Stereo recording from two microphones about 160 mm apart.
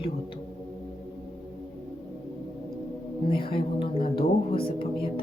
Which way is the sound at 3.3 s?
30° left (ahead or behind).